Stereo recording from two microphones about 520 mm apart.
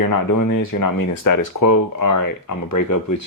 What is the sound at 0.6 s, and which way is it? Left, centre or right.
Speech, left.